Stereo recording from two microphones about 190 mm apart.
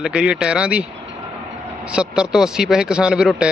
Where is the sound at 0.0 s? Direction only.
5° right (ahead or behind).